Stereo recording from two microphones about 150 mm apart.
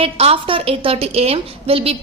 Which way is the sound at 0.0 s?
40° right (ahead or behind).